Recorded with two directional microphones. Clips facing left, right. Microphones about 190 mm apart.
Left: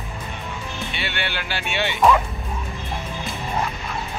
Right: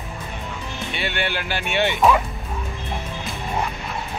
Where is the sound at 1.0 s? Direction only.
45° right (ahead or behind).